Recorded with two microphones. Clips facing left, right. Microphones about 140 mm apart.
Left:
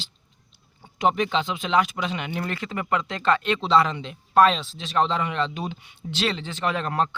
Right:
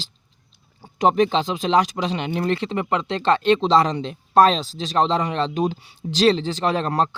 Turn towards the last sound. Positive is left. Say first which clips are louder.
# right 4 dB
turn(degrees=-35)  # may be behind; listen again after turning